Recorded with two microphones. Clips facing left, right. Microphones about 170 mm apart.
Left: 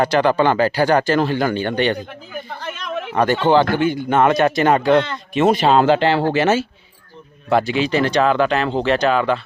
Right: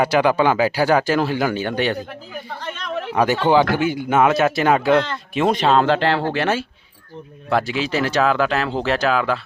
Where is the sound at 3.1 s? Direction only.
10° right (ahead or behind).